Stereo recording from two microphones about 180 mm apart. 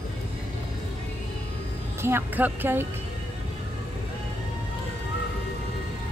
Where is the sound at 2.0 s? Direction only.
15° right (ahead or behind).